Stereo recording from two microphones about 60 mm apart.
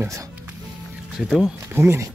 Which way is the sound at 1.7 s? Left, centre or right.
Right.